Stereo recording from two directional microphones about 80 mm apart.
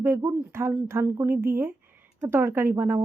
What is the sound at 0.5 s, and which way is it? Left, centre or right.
Speech, right.